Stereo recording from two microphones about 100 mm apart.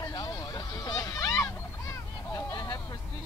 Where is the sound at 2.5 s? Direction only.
50° left (ahead or behind).